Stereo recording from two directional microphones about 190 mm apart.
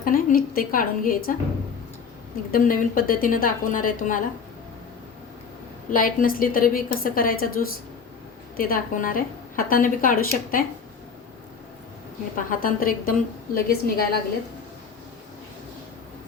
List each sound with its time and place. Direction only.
0.0 s a woman's voice: 50° left (ahead or behind)
2.5 s a woman's voice: 45° left (ahead or behind)
5.9 s a woman's voice: 50° left (ahead or behind)
12.4 s a woman's voice: 45° left (ahead or behind)